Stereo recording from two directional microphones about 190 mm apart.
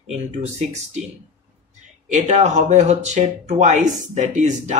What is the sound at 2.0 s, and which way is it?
Speech, 35° right (ahead or behind).